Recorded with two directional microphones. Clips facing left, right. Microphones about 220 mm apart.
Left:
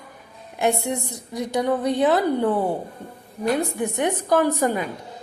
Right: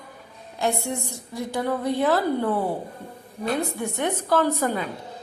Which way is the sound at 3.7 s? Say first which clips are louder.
Left 3 dB; 15° left (ahead or behind).